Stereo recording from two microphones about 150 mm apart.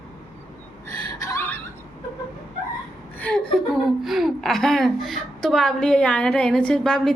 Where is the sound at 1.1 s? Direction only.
20° left (ahead or behind).